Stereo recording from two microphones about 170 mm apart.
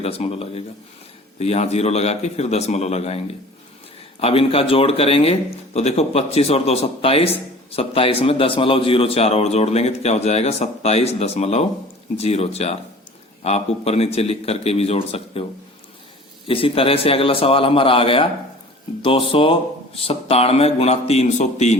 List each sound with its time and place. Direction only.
0.0 s speech: 35° left (ahead or behind)
16.5 s speech: 30° left (ahead or behind)